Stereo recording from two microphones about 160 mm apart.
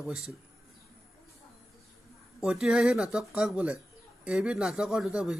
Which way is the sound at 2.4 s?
5° right (ahead or behind).